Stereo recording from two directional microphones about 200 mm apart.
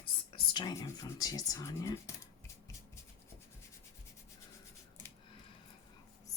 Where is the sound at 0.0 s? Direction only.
25° left (ahead or behind).